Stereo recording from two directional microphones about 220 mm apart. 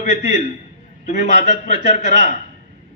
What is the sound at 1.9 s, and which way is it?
Speech, 30° left (ahead or behind).